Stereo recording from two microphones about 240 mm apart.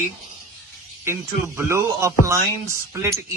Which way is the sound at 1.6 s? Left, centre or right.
Centre.